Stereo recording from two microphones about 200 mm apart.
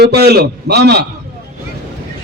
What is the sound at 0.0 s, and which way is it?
A man's voice, 55° right (ahead or behind).